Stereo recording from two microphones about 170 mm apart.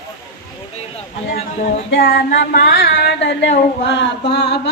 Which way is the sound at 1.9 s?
65° left (ahead or behind).